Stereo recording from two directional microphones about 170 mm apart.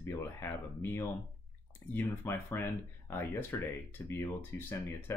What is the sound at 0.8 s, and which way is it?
Speech, 15° left (ahead or behind).